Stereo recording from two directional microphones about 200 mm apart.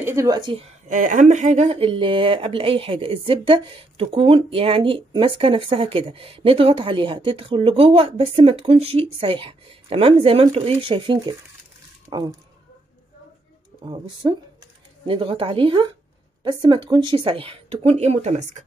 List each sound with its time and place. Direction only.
0.0 s speech: 15° right (ahead or behind)
0.8 s speech: 40° right (ahead or behind); by 12.4 s 20° right (ahead or behind)
13.8 s speech: 25° right (ahead or behind)